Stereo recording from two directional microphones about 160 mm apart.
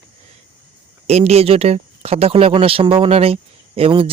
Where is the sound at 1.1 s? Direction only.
40° right (ahead or behind).